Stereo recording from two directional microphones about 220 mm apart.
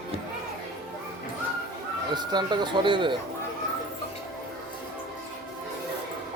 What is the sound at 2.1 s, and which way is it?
Speech, 20° right (ahead or behind).